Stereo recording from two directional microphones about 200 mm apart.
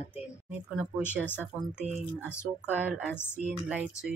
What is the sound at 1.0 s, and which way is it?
Speech, 10° left (ahead or behind).